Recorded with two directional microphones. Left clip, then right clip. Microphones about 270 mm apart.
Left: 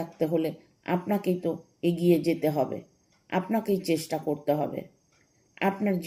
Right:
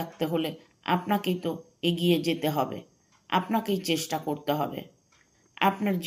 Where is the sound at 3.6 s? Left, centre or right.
Centre.